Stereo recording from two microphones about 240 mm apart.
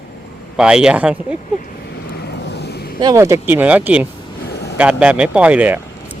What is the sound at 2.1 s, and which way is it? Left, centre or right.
Vehicle, left.